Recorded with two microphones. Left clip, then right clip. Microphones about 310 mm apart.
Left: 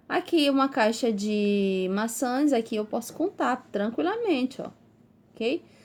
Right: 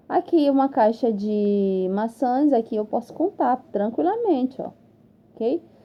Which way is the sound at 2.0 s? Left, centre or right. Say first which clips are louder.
Right 7 dB; left.